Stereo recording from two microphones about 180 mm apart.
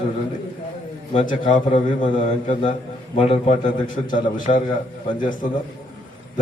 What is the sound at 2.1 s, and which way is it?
A man's voice, 25° left (ahead or behind).